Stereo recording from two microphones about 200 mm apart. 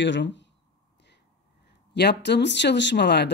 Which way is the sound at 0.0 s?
65° left (ahead or behind).